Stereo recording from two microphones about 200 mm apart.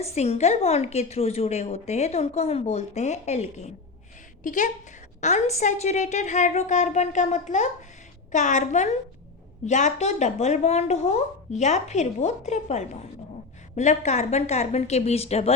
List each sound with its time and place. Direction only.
0.0 s a woman's voice: 35° left (ahead or behind)